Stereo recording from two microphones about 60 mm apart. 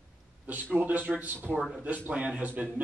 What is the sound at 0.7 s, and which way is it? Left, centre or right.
Speech, right.